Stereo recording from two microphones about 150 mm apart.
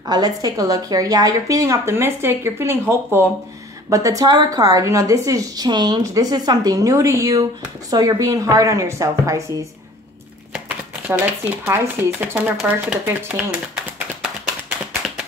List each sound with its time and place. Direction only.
0.0 s a woman's voice: 25° right (ahead or behind)
11.6 s speech: 15° right (ahead or behind)